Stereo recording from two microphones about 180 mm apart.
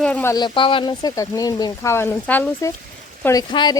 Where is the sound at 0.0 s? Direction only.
10° left (ahead or behind).